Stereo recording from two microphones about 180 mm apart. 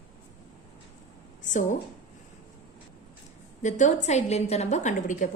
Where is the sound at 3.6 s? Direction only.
40° left (ahead or behind).